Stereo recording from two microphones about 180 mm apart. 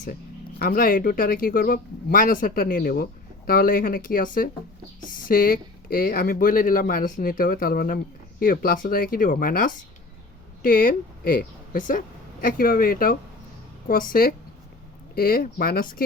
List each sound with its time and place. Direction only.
0.6 s speech: 55° left (ahead or behind)